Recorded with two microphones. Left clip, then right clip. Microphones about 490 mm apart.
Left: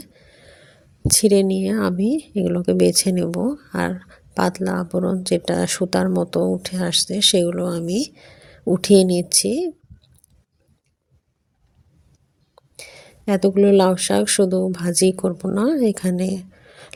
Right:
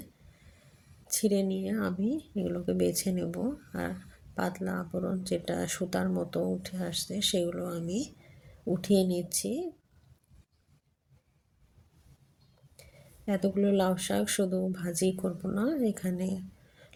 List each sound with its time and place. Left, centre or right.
1.0 s speech: centre
12.7 s speech: centre